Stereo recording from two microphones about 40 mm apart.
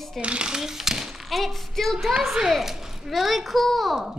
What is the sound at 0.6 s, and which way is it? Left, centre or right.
Speech, centre.